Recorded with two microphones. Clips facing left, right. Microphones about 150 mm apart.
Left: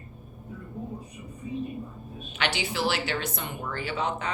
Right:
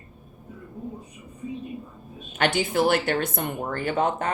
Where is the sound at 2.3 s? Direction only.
50° right (ahead or behind).